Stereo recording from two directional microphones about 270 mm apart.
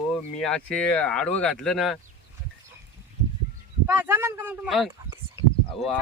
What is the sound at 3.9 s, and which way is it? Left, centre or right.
Speech, centre.